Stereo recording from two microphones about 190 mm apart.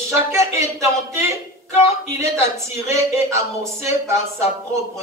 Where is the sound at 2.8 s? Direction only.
15° right (ahead or behind).